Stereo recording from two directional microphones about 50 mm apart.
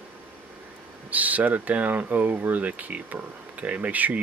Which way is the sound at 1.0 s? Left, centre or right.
Right.